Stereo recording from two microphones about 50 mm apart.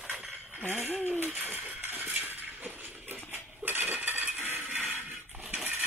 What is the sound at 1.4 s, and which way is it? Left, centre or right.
Rattle, right.